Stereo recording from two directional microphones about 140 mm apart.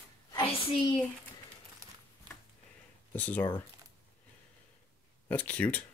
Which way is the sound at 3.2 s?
10° left (ahead or behind).